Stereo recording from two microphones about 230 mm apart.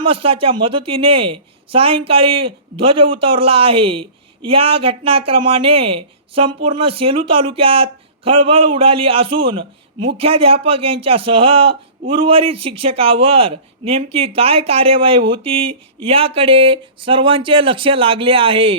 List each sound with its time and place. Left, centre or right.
0.0 s speech: right